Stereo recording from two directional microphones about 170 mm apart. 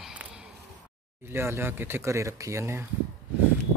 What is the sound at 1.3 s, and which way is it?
Speech, 15° right (ahead or behind).